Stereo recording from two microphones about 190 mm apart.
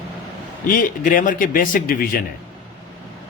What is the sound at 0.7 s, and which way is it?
A man's voice, 45° left (ahead or behind).